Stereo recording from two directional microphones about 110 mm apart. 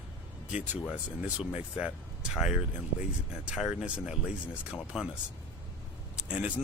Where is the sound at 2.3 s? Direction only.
5° right (ahead or behind).